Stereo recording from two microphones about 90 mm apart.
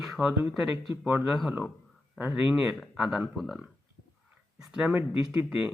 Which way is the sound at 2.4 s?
5° right (ahead or behind).